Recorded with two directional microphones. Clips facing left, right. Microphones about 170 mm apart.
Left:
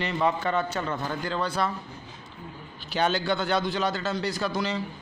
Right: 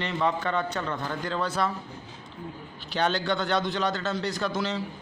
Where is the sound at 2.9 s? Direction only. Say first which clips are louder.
Left 1 dB; 10° left (ahead or behind).